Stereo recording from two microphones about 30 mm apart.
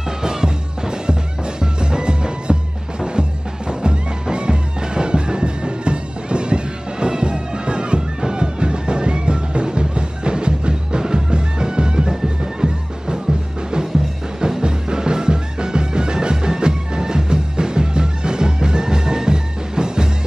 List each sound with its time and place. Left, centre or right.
0.2 s music: right
14.4 s music: right